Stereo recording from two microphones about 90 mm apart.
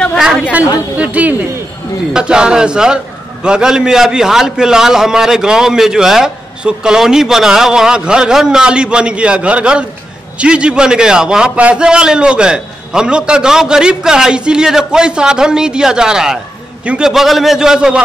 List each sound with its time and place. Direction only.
0.9 s a man's voice: 15° right (ahead or behind)
17.1 s a man's voice: 5° right (ahead or behind)